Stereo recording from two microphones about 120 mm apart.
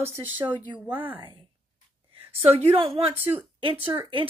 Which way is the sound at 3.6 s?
50° right (ahead or behind).